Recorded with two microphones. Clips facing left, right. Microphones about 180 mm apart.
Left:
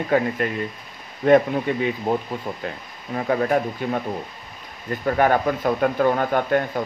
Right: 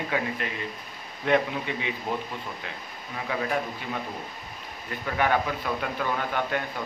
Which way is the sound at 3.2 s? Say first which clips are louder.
Left 8 dB; 45° left (ahead or behind).